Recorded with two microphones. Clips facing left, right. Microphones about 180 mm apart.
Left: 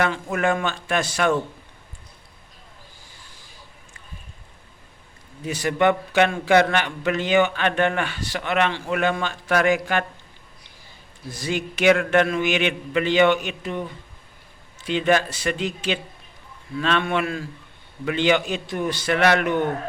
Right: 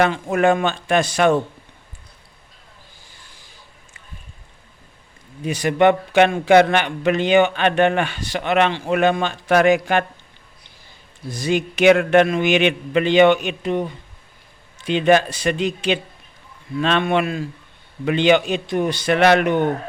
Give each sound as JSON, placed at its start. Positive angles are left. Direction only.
{"t": 0.3, "sound": "a man's voice", "side_deg": -25}
{"t": 5.5, "sound": "a man's voice", "side_deg": -15}
{"t": 11.3, "sound": "a man's voice", "side_deg": -20}
{"t": 14.8, "sound": "a man's voice", "side_deg": -20}